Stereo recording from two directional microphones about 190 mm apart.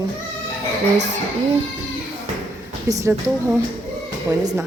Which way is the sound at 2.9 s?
15° right (ahead or behind).